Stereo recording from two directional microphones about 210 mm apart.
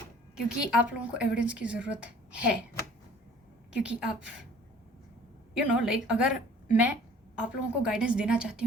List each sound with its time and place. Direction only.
0.3 s a woman's voice: 5° right (ahead or behind)
3.8 s a woman's voice: 5° right (ahead or behind)
5.5 s a woman's voice: 5° right (ahead or behind)